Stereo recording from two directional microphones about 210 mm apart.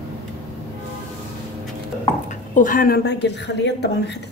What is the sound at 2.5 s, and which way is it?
Speech, 40° left (ahead or behind).